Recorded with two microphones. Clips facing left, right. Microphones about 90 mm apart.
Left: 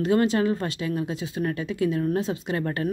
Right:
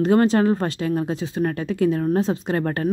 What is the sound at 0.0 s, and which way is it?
Speech, 40° right (ahead or behind).